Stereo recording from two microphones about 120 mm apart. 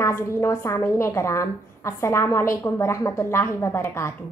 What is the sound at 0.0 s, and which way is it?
A woman's voice, 25° left (ahead or behind).